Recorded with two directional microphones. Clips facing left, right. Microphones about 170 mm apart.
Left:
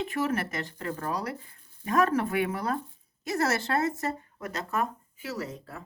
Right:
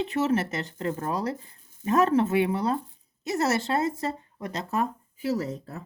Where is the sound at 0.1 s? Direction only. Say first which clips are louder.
Right 4 dB; 25° right (ahead or behind).